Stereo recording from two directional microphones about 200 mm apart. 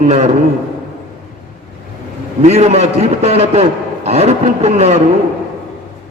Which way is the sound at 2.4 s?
30° right (ahead or behind).